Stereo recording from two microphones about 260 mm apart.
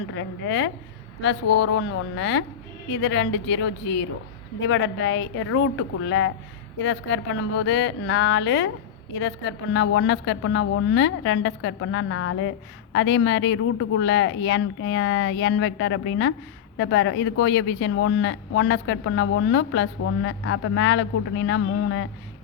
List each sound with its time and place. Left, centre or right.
0.1 s a woman's voice: left